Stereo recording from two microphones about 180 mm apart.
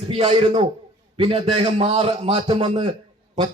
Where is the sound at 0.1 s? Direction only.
35° right (ahead or behind).